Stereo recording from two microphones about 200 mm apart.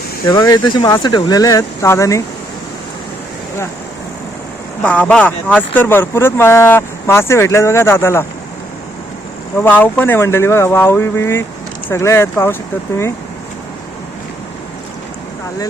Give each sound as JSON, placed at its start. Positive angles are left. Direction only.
{"t": 0.3, "sound": "speech", "side_deg": 15}
{"t": 4.8, "sound": "speech", "side_deg": 5}
{"t": 9.6, "sound": "speech", "side_deg": 10}